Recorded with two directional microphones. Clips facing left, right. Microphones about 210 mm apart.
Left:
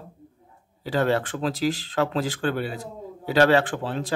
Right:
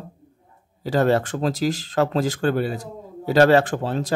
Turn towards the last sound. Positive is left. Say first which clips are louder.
# right 4 dB
turn(degrees=-40)  # may be behind; listen again after turning